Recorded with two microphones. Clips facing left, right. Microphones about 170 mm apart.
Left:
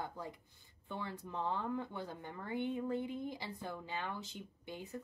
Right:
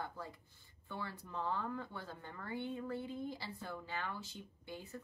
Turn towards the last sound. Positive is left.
turn(degrees=20)  # may be behind; listen again after turning